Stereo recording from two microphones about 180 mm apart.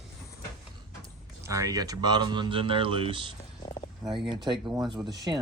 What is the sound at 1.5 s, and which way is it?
Speech, 20° right (ahead or behind).